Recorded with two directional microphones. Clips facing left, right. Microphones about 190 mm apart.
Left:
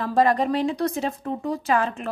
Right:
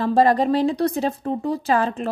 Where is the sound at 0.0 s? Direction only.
30° right (ahead or behind).